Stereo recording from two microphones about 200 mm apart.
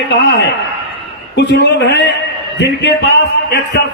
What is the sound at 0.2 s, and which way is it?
A man's voice, 60° left (ahead or behind).